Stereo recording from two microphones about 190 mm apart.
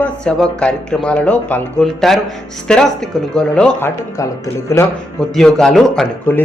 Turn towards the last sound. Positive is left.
turn(degrees=0)  # may be behind; listen again after turning